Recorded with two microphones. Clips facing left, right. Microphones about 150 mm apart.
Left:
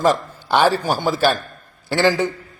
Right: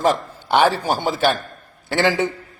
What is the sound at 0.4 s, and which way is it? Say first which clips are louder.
Speech: even; 20° right (ahead or behind).